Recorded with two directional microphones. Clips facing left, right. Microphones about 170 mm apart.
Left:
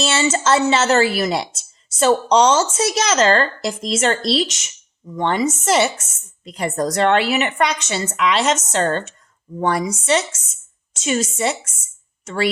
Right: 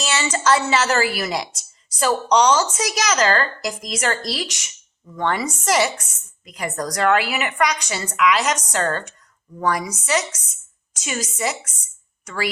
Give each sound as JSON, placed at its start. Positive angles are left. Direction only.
{"t": 0.0, "sound": "a woman's voice", "side_deg": 25}